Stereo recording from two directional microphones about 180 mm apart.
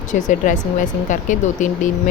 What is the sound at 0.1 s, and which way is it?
Speech, 45° left (ahead or behind).